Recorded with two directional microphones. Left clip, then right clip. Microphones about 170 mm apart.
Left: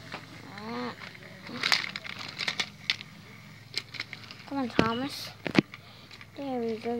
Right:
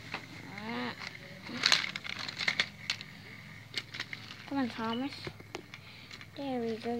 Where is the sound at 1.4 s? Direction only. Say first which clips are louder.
Left 1 dB; 10° left (ahead or behind).